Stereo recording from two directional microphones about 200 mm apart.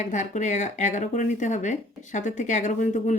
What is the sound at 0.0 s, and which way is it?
A woman's voice, 35° left (ahead or behind).